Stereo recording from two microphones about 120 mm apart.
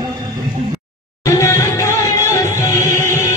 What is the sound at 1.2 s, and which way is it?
Music, 25° left (ahead or behind).